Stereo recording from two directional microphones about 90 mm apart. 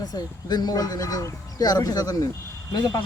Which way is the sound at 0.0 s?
45° left (ahead or behind).